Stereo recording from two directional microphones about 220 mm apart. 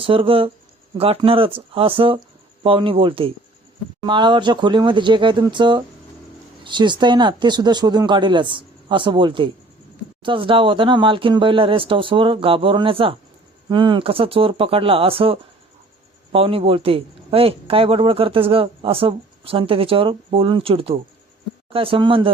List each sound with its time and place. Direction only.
0.0 s speech: 25° right (ahead or behind)